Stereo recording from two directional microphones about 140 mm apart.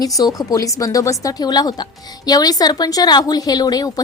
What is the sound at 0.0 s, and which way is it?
A woman's voice, 25° left (ahead or behind).